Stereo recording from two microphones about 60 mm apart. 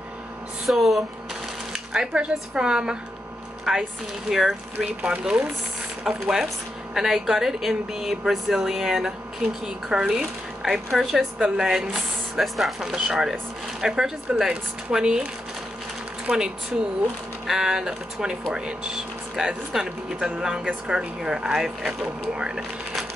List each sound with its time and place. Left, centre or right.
0.7 s speech: centre
1.7 s speech: centre
5.0 s speech: centre
17.5 s speech: centre